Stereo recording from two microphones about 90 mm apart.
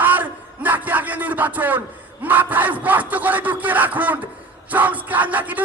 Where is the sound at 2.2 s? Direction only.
20° right (ahead or behind).